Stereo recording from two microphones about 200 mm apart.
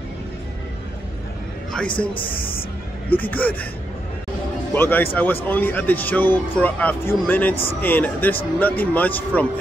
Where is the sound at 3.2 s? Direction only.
10° left (ahead or behind).